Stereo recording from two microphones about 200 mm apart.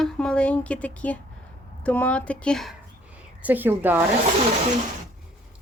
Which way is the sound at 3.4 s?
10° right (ahead or behind).